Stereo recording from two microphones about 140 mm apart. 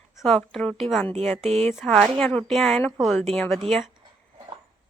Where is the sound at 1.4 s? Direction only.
45° right (ahead or behind).